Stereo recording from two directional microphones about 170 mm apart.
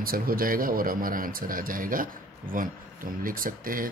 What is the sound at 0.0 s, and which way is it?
Speech, 60° right (ahead or behind).